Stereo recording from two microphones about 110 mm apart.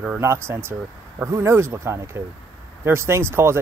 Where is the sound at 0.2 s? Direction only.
25° right (ahead or behind).